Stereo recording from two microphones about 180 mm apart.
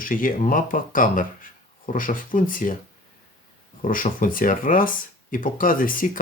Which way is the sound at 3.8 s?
50° left (ahead or behind).